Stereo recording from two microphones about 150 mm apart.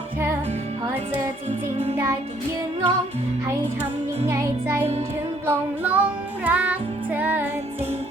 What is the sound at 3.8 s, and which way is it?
Music, 45° right (ahead or behind).